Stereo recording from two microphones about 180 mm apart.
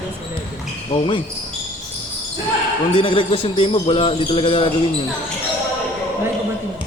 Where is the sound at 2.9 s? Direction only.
30° left (ahead or behind).